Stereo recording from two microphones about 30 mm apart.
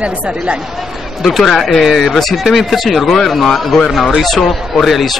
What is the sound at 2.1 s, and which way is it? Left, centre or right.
Speech, centre.